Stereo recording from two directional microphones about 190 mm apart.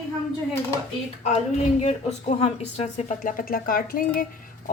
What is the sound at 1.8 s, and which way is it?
A woman's voice, 35° left (ahead or behind).